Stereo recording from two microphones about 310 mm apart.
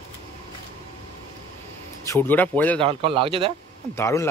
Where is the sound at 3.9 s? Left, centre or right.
Centre.